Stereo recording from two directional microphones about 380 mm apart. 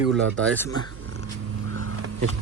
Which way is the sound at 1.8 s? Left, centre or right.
Right.